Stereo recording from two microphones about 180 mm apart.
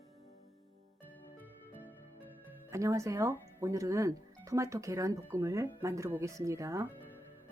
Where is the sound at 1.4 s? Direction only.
10° right (ahead or behind).